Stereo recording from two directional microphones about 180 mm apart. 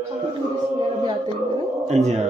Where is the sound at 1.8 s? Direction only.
40° right (ahead or behind).